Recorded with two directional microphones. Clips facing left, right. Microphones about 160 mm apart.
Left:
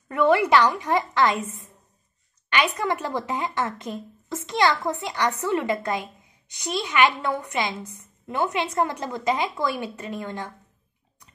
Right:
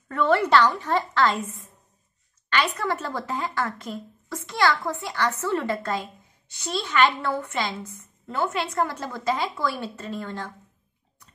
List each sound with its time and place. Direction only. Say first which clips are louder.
0.1 s a woman's voice: left 1 dB; 15° left (ahead or behind)
2.5 s a woman's voice: left 1 dB; 15° left (ahead or behind)